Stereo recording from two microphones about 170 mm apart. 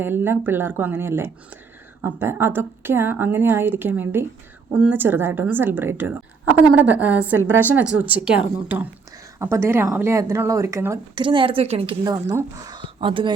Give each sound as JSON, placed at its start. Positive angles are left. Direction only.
{"t": 0.0, "sound": "a woman's voice", "side_deg": -15}
{"t": 11.2, "sound": "a woman's voice", "side_deg": -30}
{"t": 12.0, "sound": "speech", "side_deg": -20}